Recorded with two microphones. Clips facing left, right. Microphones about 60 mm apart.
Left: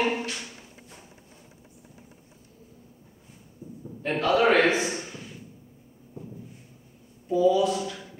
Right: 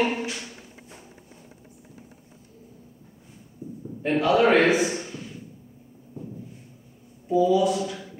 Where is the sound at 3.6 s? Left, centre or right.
Left.